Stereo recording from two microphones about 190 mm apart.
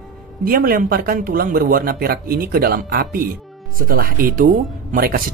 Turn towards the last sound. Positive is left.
turn(degrees=-50)  # may be behind; listen again after turning